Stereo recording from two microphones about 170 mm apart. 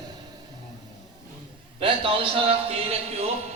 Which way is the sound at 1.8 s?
30° right (ahead or behind).